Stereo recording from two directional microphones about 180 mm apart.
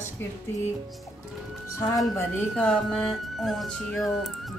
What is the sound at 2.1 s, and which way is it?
Speech, 5° left (ahead or behind).